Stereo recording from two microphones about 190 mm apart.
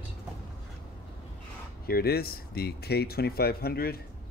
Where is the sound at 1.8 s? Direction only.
55° left (ahead or behind).